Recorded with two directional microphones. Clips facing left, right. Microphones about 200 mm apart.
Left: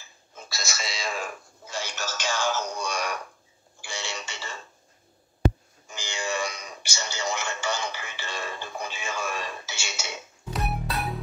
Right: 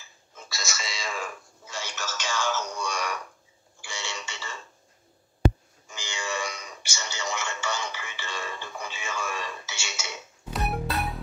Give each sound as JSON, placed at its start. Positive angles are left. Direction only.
{"t": 0.5, "sound": "speech", "side_deg": 35}
{"t": 1.7, "sound": "synthetic singing", "side_deg": 35}
{"t": 3.8, "sound": "a sound", "side_deg": 35}
{"t": 5.9, "sound": "a sound", "side_deg": 35}
{"t": 9.7, "sound": "music", "side_deg": 35}
{"t": 10.5, "sound": "music", "side_deg": 0}